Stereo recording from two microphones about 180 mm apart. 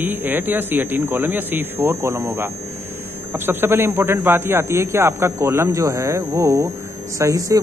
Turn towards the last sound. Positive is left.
turn(degrees=-20)  # may be behind; listen again after turning